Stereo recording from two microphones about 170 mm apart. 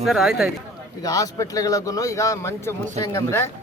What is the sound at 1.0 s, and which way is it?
A man's voice, 20° left (ahead or behind).